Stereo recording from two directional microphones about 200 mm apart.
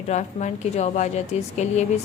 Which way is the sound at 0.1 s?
35° left (ahead or behind).